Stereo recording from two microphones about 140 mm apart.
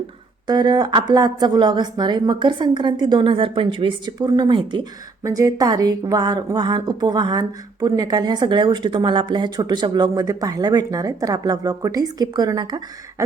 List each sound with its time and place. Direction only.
0.4 s a woman's voice: 30° right (ahead or behind)
5.2 s speech: 25° right (ahead or behind)